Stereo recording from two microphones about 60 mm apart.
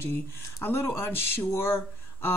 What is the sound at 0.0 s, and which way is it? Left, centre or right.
Speech, left.